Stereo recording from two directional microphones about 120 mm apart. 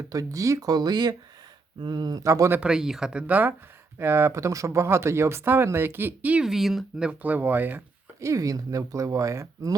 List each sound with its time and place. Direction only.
0.1 s speech: 30° right (ahead or behind)
2.6 s speech: 5° right (ahead or behind)
8.2 s speech: 30° right (ahead or behind)